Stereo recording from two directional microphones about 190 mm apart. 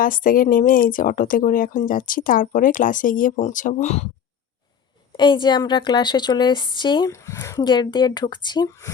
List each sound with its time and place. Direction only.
0.0 s speech: 45° left (ahead or behind)
5.1 s a woman's voice: 25° left (ahead or behind)